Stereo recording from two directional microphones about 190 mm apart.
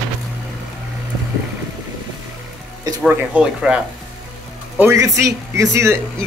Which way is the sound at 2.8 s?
20° right (ahead or behind).